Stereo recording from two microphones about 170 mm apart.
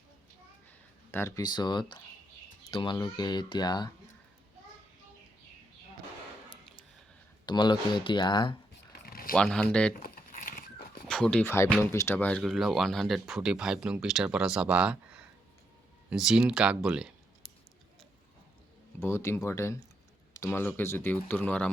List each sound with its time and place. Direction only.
1.1 s speech: 15° left (ahead or behind)
1.5 s speech: 25° left (ahead or behind)
7.4 s speech: 25° left (ahead or behind)
9.0 s a sound: 60° left (ahead or behind)
9.3 s speech: 5° left (ahead or behind)
10.0 s crumpling: 55° left (ahead or behind)
11.1 s speech: 5° left (ahead or behind)
18.9 s speech: 15° left (ahead or behind)